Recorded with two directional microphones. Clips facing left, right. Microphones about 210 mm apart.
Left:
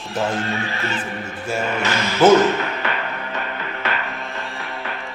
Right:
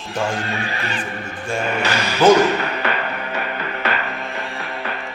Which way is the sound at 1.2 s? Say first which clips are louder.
Right 1 dB; 5° left (ahead or behind).